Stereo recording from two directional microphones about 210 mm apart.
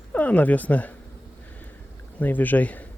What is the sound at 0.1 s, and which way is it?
Speech, 5° left (ahead or behind).